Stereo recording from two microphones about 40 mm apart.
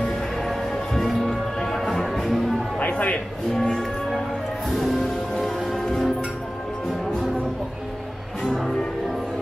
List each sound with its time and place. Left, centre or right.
0.9 s music: centre
2.8 s a sound: left
4.6 s music: centre
8.5 s music: centre